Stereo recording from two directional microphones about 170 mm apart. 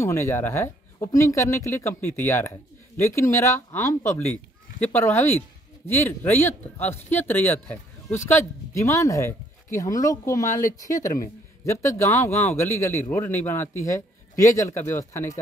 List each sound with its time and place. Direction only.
0.0 s speech: 15° left (ahead or behind)